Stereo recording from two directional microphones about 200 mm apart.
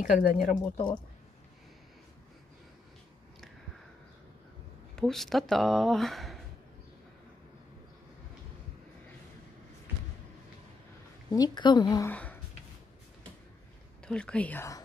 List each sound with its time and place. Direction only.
0.0 s speech: 40° left (ahead or behind)
4.9 s speech: centre (ahead or behind)
11.2 s a woman's voice: 20° left (ahead or behind)
12.1 s a sound: 10° left (ahead or behind)
14.0 s speech: 5° left (ahead or behind)